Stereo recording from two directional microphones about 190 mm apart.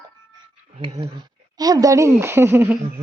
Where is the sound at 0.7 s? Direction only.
35° right (ahead or behind).